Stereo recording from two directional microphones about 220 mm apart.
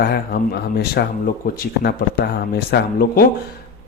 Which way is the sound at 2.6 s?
45° left (ahead or behind).